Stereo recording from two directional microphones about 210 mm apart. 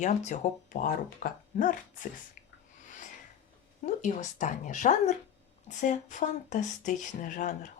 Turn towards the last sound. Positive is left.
turn(degrees=35)  # may be behind; listen again after turning